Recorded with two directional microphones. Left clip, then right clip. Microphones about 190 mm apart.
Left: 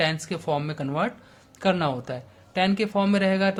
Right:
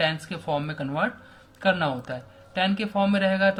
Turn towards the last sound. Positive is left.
turn(degrees=45)  # may be behind; listen again after turning